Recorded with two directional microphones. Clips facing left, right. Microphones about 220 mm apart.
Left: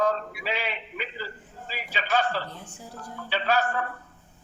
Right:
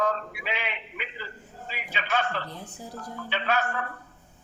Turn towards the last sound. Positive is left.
turn(degrees=35)  # may be behind; listen again after turning